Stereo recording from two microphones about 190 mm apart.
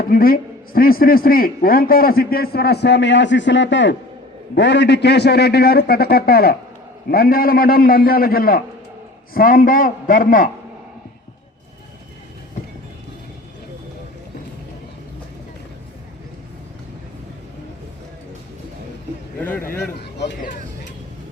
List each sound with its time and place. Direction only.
0.1 s a man's voice: 50° left (ahead or behind)
19.4 s a man's voice: 10° left (ahead or behind)